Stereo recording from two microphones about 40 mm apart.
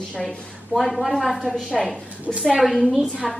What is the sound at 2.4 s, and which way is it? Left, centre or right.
Speech, centre.